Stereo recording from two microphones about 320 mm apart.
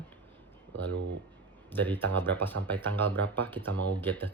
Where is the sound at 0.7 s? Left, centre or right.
Right.